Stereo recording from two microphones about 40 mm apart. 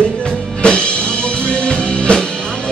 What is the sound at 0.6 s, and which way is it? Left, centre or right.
Music, left.